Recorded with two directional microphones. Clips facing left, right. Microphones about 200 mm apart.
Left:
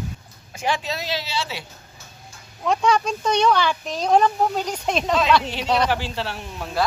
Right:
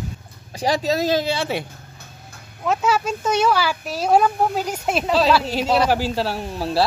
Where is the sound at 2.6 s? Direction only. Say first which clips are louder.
Even; 5° right (ahead or behind).